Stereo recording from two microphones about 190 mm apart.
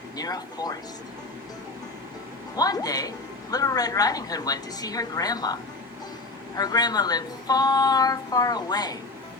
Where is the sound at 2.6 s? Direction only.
20° left (ahead or behind).